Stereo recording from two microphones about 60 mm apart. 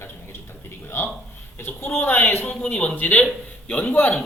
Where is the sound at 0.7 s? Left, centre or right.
Left.